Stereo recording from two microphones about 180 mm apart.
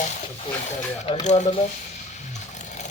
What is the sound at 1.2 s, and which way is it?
Speech, 40° left (ahead or behind).